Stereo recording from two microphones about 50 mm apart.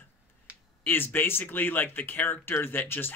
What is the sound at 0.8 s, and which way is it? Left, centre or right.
Speech, left.